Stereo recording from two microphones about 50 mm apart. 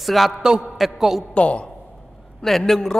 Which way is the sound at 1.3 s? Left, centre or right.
Left.